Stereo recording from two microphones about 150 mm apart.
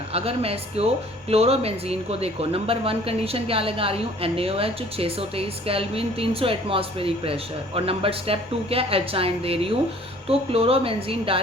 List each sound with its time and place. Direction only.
0.1 s speech: 40° right (ahead or behind)